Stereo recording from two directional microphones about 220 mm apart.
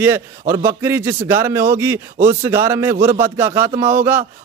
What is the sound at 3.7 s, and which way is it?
Speech, 30° right (ahead or behind).